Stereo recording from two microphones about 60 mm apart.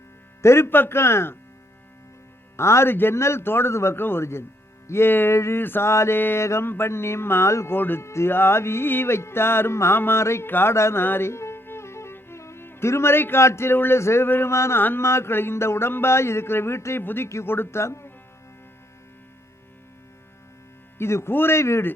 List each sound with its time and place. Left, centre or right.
0.4 s speech: left
2.6 s speech: left
4.9 s a sound: left
5.9 s speech: left
6.1 s a sound: left
6.4 s speech: left
7.8 s a sound: left
8.0 s speech: left
11.0 s music: left
13.4 s speech: left
14.8 s a sound: left
15.0 s speech: left
21.0 s speech: left